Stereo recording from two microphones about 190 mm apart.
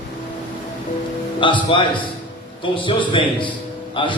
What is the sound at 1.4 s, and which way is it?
A man's voice, 25° left (ahead or behind).